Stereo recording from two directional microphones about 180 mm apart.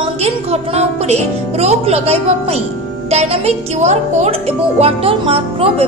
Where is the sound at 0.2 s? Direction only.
35° right (ahead or behind).